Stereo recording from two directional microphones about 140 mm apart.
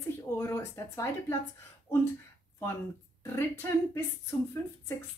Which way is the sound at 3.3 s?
15° left (ahead or behind).